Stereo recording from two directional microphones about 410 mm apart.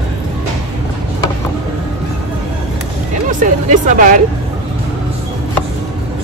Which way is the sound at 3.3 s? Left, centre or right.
Centre.